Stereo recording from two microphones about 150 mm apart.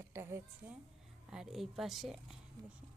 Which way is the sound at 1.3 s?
5° right (ahead or behind).